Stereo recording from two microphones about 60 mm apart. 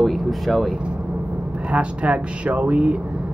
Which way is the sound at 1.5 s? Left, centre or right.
Right.